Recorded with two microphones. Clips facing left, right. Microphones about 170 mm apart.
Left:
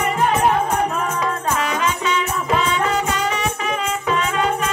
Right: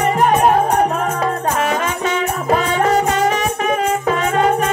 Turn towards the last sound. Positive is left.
turn(degrees=-45)  # may be behind; listen again after turning